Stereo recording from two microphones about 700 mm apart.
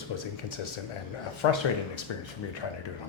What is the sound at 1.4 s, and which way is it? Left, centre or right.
Speech, left.